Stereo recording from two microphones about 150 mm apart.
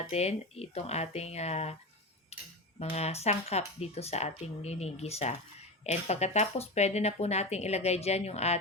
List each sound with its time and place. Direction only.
0.1 s speech: 45° left (ahead or behind)
2.3 s tick-tock: 45° left (ahead or behind)
2.7 s speech: 45° left (ahead or behind)